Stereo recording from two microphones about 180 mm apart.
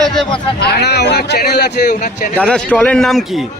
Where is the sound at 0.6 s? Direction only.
65° left (ahead or behind).